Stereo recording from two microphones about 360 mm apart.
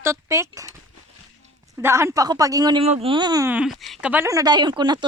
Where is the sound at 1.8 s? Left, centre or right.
Centre.